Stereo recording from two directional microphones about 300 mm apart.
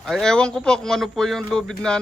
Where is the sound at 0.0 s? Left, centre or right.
Centre.